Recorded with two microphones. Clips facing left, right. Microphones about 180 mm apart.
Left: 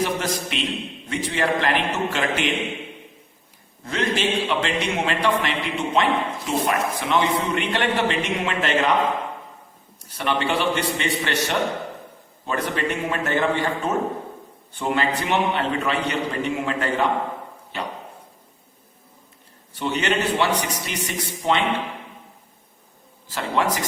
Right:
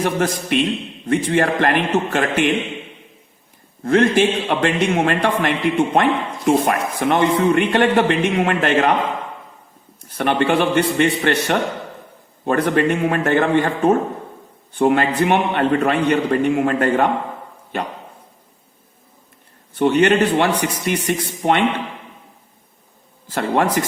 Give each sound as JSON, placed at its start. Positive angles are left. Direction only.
{"t": 0.0, "sound": "a man's voice", "side_deg": -50}
{"t": 3.8, "sound": "a man's voice", "side_deg": -50}
{"t": 10.1, "sound": "a man's voice", "side_deg": -55}
{"t": 19.7, "sound": "a man's voice", "side_deg": -55}
{"t": 23.3, "sound": "a man's voice", "side_deg": -55}